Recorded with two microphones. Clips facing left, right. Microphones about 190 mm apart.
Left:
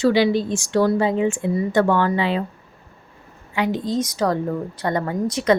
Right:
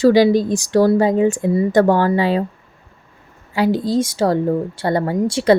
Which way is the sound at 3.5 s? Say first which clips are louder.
Right 5 dB; 35° right (ahead or behind).